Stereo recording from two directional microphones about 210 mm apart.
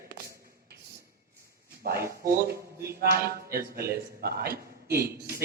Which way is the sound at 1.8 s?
45° right (ahead or behind).